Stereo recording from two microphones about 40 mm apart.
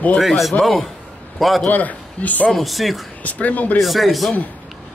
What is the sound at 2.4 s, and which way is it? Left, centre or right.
Speech, centre.